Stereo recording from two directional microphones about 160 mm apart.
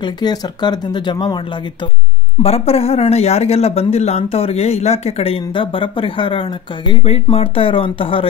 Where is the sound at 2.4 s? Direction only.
40° left (ahead or behind).